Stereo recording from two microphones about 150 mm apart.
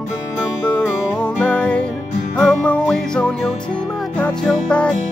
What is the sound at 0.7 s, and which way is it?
Music, 10° left (ahead or behind).